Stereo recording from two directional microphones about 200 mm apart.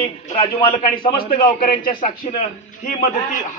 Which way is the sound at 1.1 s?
45° left (ahead or behind).